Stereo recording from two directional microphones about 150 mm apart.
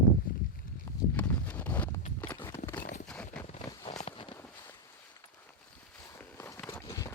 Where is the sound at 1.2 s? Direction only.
10° left (ahead or behind).